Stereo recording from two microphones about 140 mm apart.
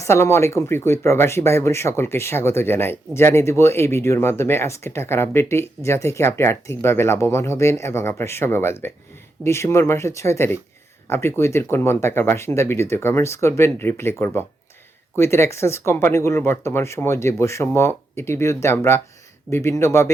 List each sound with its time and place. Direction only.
0.0 s speech: 20° left (ahead or behind)